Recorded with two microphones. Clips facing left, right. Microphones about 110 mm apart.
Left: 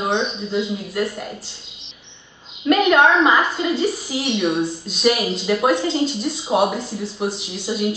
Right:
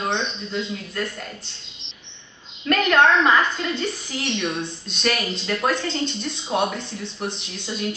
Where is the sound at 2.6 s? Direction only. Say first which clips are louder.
Left 3 dB; 10° left (ahead or behind).